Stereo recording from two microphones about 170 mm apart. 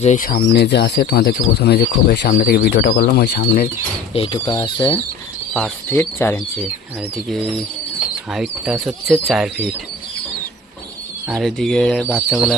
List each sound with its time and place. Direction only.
0.0 s speech: 50° left (ahead or behind); by 3.7 s 65° left (ahead or behind)
4.1 s speech: 30° left (ahead or behind)
5.9 s speech: 10° left (ahead or behind)
8.3 s speech: 5° right (ahead or behind)
11.3 s speech: centre (ahead or behind)